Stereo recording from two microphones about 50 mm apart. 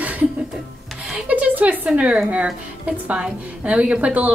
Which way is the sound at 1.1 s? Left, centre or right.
Right.